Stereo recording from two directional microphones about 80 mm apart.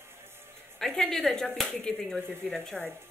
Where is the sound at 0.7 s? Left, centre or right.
Centre.